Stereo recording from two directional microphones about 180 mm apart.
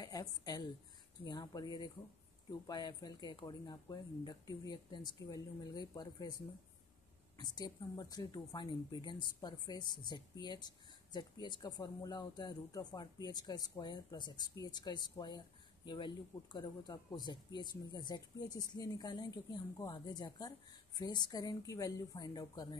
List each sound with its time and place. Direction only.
0.0 s a woman's voice: 20° left (ahead or behind)